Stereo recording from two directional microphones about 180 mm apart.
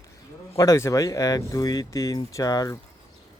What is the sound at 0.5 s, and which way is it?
Speech, 20° left (ahead or behind).